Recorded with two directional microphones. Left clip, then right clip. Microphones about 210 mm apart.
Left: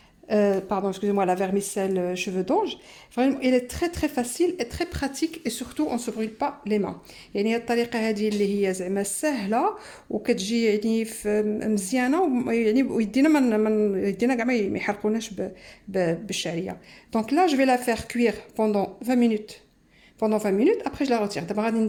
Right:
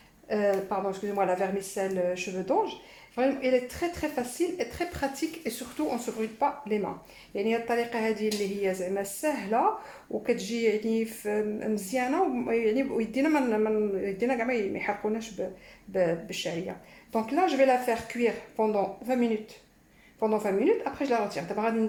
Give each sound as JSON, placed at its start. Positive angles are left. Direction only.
{"t": 0.3, "sound": "speech", "side_deg": 45}